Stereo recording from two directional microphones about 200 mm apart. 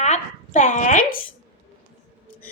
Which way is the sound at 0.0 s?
35° left (ahead or behind).